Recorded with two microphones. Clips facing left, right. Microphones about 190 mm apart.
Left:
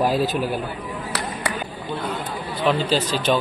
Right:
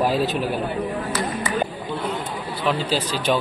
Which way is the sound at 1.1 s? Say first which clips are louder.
Right 2 dB; 65° left (ahead or behind).